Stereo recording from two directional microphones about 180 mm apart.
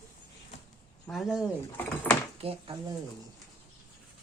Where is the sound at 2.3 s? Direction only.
35° right (ahead or behind).